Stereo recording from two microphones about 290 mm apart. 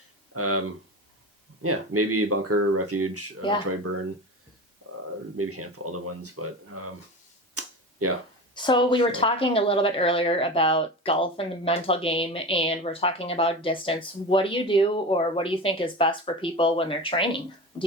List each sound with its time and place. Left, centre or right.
0.3 s speech: right
1.6 s speech: right
5.4 s speech: right
7.5 s tick-tock: right
8.5 s a woman's voice: centre